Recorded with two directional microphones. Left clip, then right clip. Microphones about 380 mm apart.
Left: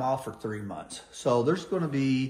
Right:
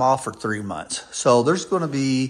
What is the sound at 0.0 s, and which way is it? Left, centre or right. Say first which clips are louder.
Speech: right 10 dB; centre.